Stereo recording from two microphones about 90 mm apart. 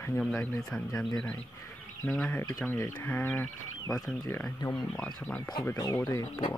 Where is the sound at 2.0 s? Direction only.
5° left (ahead or behind).